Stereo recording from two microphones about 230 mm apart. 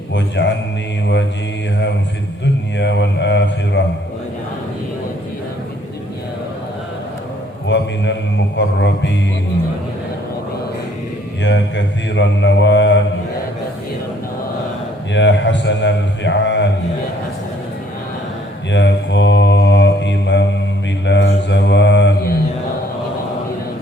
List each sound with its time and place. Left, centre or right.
0.1 s a man's voice: left
2.7 s a man's voice: left
7.7 s a man's voice: left
11.4 s a man's voice: left
15.1 s a man's voice: left
18.7 s mantra: left